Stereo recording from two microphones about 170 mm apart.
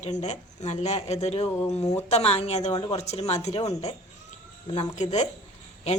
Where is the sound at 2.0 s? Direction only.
40° left (ahead or behind).